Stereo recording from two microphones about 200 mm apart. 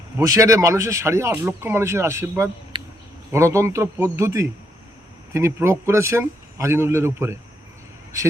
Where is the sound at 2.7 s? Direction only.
25° right (ahead or behind).